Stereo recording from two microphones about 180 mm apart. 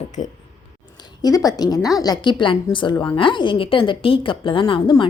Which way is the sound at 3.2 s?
25° left (ahead or behind).